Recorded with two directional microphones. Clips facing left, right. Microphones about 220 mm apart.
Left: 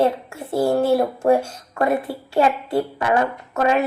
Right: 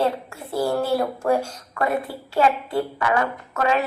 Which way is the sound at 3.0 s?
30° left (ahead or behind).